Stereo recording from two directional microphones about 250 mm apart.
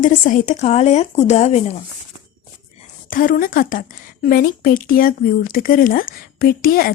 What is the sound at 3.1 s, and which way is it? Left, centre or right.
Speech, left.